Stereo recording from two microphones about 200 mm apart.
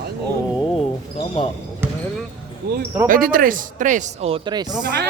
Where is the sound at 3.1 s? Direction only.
45° right (ahead or behind); by 4.7 s 20° right (ahead or behind).